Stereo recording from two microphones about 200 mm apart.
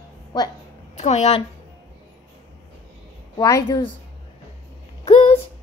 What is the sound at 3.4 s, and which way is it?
Speech, 15° left (ahead or behind).